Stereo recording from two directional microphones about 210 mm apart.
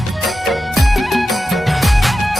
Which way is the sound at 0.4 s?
Centre (ahead or behind).